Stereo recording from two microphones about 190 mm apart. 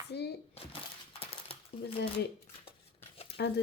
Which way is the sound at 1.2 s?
30° left (ahead or behind).